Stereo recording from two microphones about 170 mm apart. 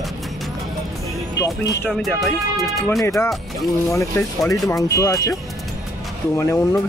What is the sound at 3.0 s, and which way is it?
Speech, 15° left (ahead or behind).